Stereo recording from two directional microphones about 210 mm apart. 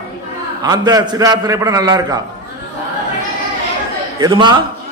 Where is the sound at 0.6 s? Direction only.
20° right (ahead or behind).